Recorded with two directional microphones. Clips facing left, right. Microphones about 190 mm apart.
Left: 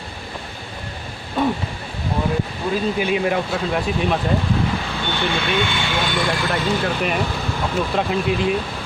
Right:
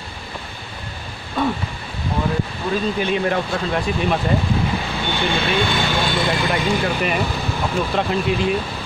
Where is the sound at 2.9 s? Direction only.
10° left (ahead or behind).